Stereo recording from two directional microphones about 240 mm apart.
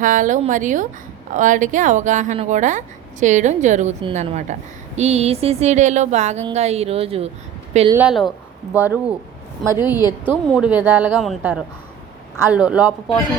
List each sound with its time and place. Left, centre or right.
0.0 s a woman's voice: right
4.9 s a sound: right
7.7 s speech: right
7.9 s speech: centre